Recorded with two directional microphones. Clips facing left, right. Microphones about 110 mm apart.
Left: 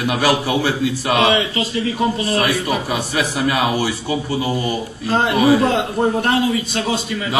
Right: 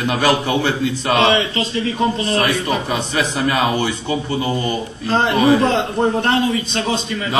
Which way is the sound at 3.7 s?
10° left (ahead or behind).